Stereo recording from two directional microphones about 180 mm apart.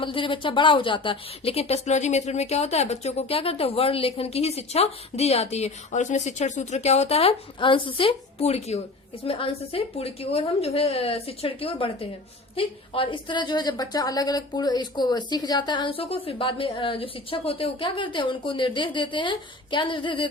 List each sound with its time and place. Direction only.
0.0 s a woman's voice: 30° left (ahead or behind)